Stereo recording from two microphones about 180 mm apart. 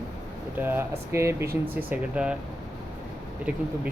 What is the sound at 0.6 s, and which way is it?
Speech, 10° right (ahead or behind).